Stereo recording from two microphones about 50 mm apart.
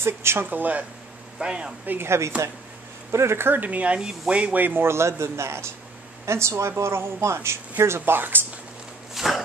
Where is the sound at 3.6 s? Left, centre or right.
Right.